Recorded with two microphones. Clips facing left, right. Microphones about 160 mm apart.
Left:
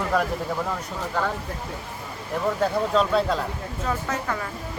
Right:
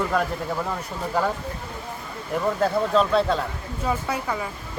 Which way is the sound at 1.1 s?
10° right (ahead or behind).